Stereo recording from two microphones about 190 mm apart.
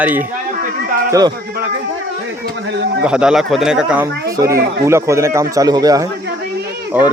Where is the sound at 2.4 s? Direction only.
65° right (ahead or behind).